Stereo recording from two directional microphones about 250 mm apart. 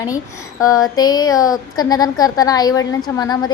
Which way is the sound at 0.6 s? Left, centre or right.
Centre.